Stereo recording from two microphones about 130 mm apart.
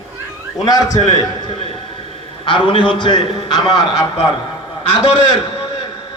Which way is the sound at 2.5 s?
40° left (ahead or behind).